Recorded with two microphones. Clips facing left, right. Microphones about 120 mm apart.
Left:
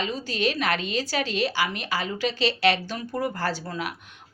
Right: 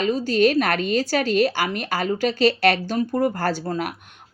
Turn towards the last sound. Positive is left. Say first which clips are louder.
# right 5 dB
turn(degrees=-45)  # may be behind; listen again after turning